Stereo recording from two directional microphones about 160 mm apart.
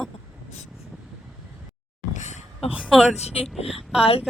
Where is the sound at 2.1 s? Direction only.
45° left (ahead or behind).